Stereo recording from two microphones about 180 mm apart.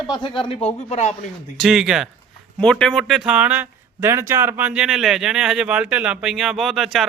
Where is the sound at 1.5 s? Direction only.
Centre (ahead or behind).